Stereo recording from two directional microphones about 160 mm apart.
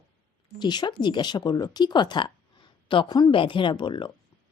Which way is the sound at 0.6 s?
25° left (ahead or behind).